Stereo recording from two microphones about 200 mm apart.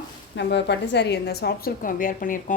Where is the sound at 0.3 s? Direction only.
60° left (ahead or behind).